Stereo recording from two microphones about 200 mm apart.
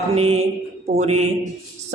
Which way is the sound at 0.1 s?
30° right (ahead or behind).